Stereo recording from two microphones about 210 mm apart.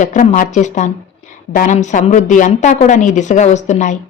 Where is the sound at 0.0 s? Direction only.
35° left (ahead or behind).